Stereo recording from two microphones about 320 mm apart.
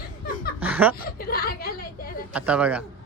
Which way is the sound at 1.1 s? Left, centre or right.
Left.